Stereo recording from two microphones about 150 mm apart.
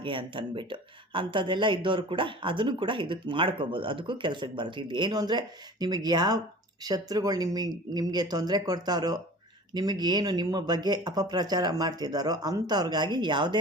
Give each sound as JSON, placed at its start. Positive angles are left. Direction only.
{"t": 0.0, "sound": "speech", "side_deg": -35}